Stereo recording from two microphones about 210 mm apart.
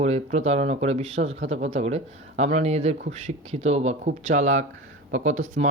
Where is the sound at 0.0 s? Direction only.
30° right (ahead or behind).